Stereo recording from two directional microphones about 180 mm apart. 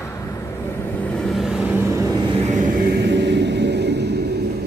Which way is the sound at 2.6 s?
65° right (ahead or behind).